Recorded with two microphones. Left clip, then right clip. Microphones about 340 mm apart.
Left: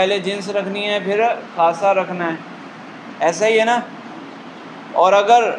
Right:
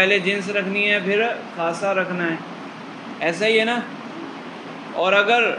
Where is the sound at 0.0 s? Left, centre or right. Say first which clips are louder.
Even; centre.